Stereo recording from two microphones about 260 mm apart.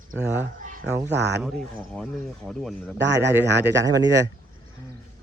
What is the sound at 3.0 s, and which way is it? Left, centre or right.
Speech, right.